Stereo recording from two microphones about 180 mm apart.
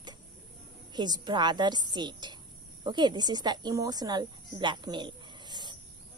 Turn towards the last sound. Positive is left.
turn(degrees=-25)  # may be behind; listen again after turning